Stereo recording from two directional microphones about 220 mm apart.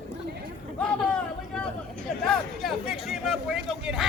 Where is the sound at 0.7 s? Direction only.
5° left (ahead or behind).